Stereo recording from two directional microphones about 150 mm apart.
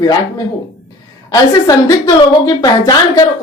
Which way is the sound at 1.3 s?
25° left (ahead or behind).